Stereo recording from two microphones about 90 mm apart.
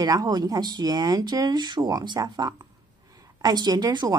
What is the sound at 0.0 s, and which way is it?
A woman's voice, 50° right (ahead or behind).